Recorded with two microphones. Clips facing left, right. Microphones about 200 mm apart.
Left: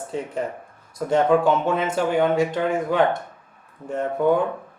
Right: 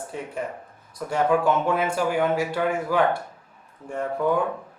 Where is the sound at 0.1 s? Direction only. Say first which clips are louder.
Left 6 dB; 25° left (ahead or behind).